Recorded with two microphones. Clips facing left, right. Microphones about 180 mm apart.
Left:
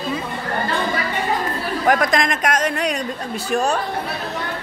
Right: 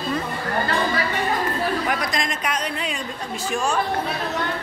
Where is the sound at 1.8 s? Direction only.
50° left (ahead or behind).